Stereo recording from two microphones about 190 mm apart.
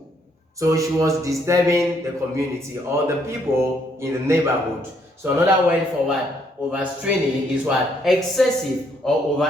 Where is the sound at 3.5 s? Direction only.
15° right (ahead or behind).